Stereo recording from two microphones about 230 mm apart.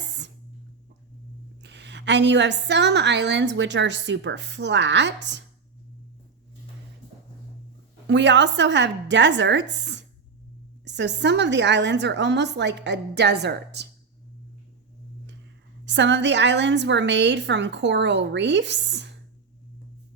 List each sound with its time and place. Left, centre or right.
1.6 s a woman's voice: right
8.0 s a woman's voice: right
15.9 s a woman's voice: right